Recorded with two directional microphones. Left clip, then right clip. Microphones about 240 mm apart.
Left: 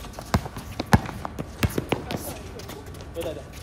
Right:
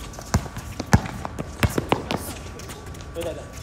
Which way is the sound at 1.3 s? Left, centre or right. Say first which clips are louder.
Right 5 dB; centre.